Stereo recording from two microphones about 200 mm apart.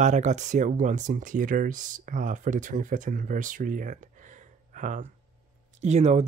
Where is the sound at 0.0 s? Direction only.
35° right (ahead or behind).